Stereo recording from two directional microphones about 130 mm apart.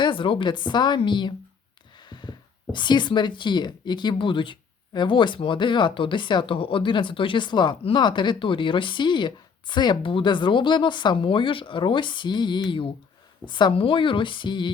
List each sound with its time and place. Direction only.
0.0 s speech: 40° left (ahead or behind)
2.0 s a sound: 35° left (ahead or behind)
2.7 s speech: 35° left (ahead or behind)